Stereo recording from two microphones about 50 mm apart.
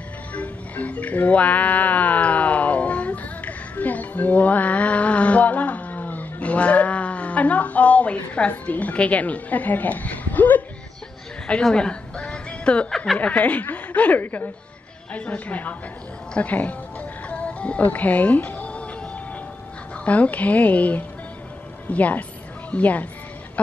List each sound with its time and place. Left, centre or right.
0.3 s music: left
11.6 s music: centre
12.9 s a woman's voice: centre
13.2 s a woman's voice: left
17.3 s music: left
17.8 s speech: left
20.1 s speech: left